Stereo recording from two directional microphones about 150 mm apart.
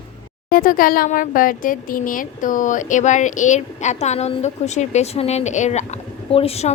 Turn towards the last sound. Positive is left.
turn(degrees=40)  # may be behind; listen again after turning